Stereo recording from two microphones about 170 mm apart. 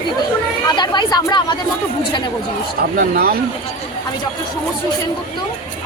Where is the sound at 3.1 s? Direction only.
60° right (ahead or behind).